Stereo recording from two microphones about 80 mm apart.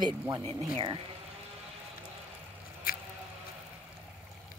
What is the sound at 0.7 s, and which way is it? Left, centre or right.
Speech, right.